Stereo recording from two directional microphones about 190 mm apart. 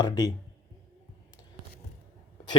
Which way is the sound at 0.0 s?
20° left (ahead or behind).